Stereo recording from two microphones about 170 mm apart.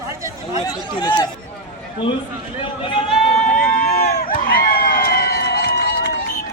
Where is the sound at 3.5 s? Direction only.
55° left (ahead or behind).